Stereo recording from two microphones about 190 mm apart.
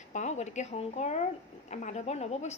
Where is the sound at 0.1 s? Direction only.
35° left (ahead or behind).